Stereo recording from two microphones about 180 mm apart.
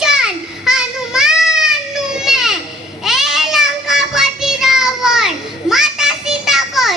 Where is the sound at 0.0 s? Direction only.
5° right (ahead or behind).